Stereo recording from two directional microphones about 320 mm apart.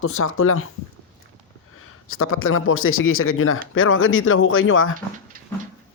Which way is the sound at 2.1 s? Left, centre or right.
Left.